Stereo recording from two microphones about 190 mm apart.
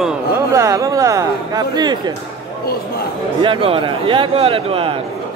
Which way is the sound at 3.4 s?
25° right (ahead or behind).